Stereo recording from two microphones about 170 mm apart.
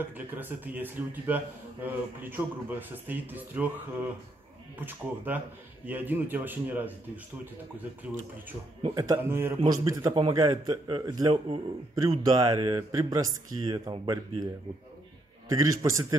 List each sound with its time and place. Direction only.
0.3 s speech: 10° right (ahead or behind)
4.7 s speech: 10° right (ahead or behind)
8.8 s a man's voice: 20° right (ahead or behind)
15.5 s a man's voice: 20° right (ahead or behind)